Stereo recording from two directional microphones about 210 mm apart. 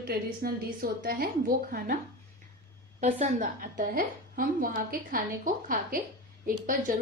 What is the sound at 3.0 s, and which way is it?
A woman's voice, 35° right (ahead or behind).